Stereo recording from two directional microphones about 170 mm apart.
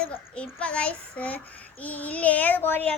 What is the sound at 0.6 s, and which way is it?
Child singing, 5° left (ahead or behind).